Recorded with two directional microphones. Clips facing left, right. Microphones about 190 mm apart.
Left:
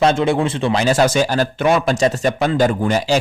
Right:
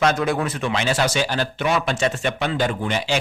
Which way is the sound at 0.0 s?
25° left (ahead or behind).